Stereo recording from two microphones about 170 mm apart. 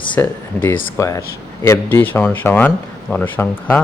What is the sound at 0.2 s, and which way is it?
Speech, 15° left (ahead or behind).